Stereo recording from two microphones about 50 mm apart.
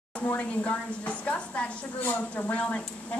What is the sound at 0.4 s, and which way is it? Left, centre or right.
A woman's voice, left.